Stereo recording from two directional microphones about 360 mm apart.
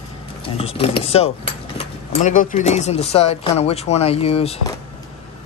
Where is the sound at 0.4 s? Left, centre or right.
Centre.